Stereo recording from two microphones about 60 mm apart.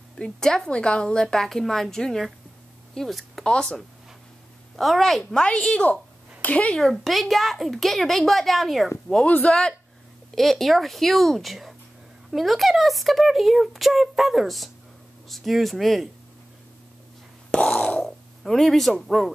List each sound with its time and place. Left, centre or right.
0.2 s speech: centre
2.9 s a sound: centre
3.4 s a woman's voice: centre
5.3 s speech: centre
6.8 s a woman's voice: centre
9.2 s speech: left
9.5 s a woman's voice: centre
17.7 s a sound: left
18.0 s speech: centre